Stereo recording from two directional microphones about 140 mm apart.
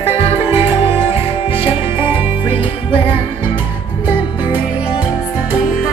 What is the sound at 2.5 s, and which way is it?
Music, 40° left (ahead or behind).